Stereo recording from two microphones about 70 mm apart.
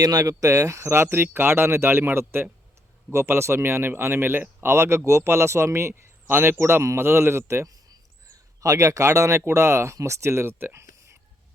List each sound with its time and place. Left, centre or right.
0.0 s speech: right
0.3 s speech: right
8.6 s speech: right